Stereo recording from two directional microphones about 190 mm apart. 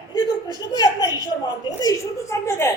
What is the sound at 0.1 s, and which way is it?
A woman's voice, 25° left (ahead or behind).